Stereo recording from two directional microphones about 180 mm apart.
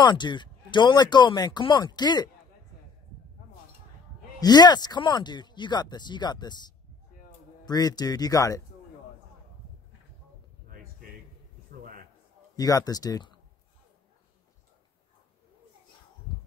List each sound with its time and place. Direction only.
0.0 s speech: 25° left (ahead or behind)
4.4 s speech: 20° left (ahead or behind)
7.6 s speech: 20° left (ahead or behind)
10.7 s a sound: 55° right (ahead or behind)
12.5 s speech: 20° left (ahead or behind)